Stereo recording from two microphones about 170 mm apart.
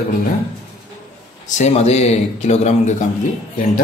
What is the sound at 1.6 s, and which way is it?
Speech, 40° left (ahead or behind).